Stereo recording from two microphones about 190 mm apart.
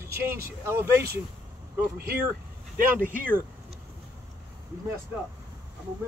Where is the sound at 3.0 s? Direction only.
45° right (ahead or behind).